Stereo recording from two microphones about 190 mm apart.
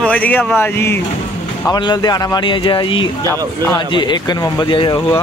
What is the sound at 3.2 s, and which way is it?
Speech, 15° left (ahead or behind).